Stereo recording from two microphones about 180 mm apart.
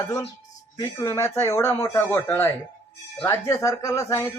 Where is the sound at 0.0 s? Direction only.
20° left (ahead or behind).